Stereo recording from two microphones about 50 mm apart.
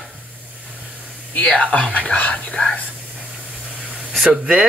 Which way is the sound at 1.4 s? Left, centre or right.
Left.